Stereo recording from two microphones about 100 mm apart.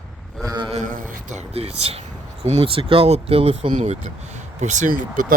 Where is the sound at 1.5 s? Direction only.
90° right; by 3.9 s 65° right (ahead or behind).